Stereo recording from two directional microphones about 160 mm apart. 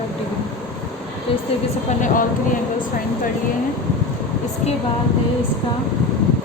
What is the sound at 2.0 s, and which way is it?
Speech, 55° left (ahead or behind).